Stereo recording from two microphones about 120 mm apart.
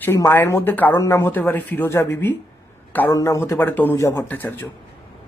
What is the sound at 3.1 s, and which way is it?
Speech, 25° left (ahead or behind).